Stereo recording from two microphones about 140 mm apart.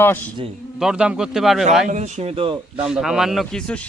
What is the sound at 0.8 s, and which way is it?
Speech, 5° right (ahead or behind).